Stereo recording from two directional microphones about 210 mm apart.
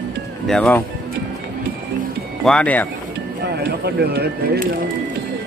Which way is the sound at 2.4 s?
5° left (ahead or behind).